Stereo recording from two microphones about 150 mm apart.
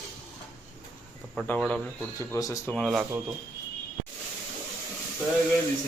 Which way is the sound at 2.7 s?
Centre (ahead or behind).